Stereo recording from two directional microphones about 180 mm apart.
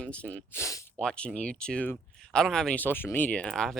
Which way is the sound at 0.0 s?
5° left (ahead or behind).